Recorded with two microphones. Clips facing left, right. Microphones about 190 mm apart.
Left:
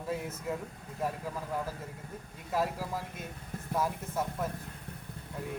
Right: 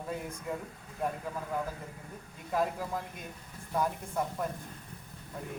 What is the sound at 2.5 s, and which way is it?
Speech, 5° left (ahead or behind).